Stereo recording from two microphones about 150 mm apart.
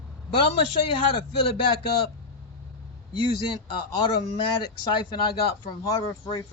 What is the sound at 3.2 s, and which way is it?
A man's voice, 30° left (ahead or behind).